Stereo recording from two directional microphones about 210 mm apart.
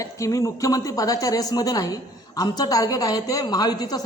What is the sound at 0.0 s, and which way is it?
A woman's voice, 15° left (ahead or behind).